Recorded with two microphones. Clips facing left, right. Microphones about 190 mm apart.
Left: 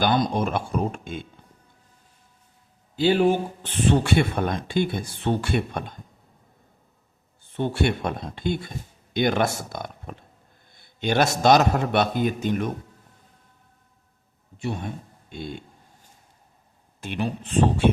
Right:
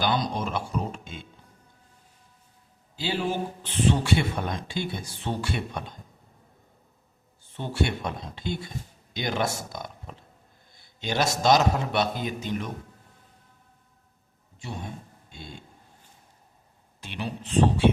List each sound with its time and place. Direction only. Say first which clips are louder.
0.0 s speech: left 5 dB; 50° left (ahead or behind)
2.9 s speech: left 9 dB; 55° left (ahead or behind)
7.5 s speech: left 4 dB; 55° left (ahead or behind)
15.3 s speech: left 10 dB; 60° left (ahead or behind)
17.0 s speech: left 6 dB; 50° left (ahead or behind)